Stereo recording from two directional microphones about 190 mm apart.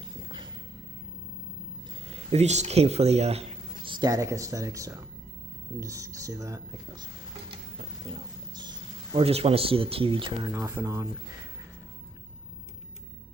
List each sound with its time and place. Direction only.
2.3 s speech: 35° right (ahead or behind); by 7.1 s 20° right (ahead or behind)
8.1 s a sound: 20° right (ahead or behind)
9.1 s speech: 30° right (ahead or behind); by 11.1 s 15° right (ahead or behind)